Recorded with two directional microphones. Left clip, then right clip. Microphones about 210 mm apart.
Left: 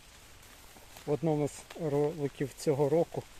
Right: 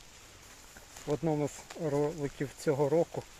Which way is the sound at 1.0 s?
15° left (ahead or behind).